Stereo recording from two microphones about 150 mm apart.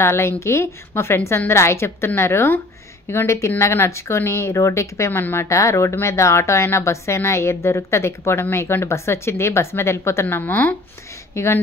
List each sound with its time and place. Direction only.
0.0 s speech: 15° left (ahead or behind)